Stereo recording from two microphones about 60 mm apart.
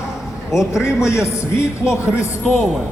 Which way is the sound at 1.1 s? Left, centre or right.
Left.